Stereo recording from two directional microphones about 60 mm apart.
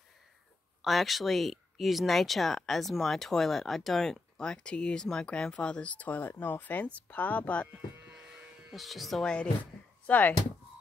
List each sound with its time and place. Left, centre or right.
0.8 s speech: centre; by 7.6 s left
8.1 s electric shaver: centre
8.7 s speech: centre
10.0 s speech: left